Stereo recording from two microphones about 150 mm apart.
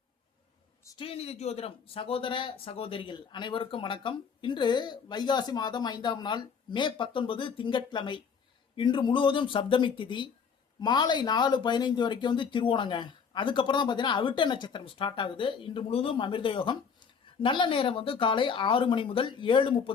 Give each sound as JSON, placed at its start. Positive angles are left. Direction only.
{"t": 1.0, "sound": "speech", "side_deg": 40}